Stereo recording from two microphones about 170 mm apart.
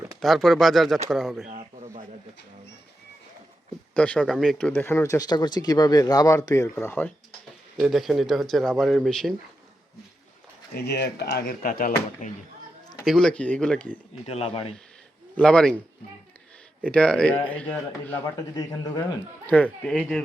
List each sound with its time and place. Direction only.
0.2 s speech: centre (ahead or behind)
1.5 s speech: 45° right (ahead or behind)
3.9 s speech: 5° left (ahead or behind)
7.8 s speech: centre (ahead or behind)
10.8 s speech: 75° left (ahead or behind); by 11.9 s 55° left (ahead or behind)
13.1 s speech: 5° left (ahead or behind)
14.3 s speech: 35° left (ahead or behind)
15.4 s speech: 5° left (ahead or behind)
16.9 s speech: 5° left (ahead or behind)
19.8 s speech: centre (ahead or behind)